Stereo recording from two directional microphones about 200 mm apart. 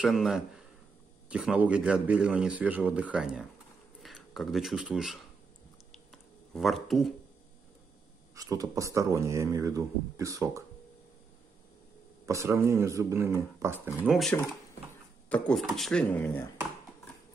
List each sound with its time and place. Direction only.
0.0 s speech: centre (ahead or behind)
6.5 s speech: centre (ahead or behind)
8.4 s speech: 15° right (ahead or behind)
12.3 s speech: 15° right (ahead or behind)
14.0 s speech: centre (ahead or behind)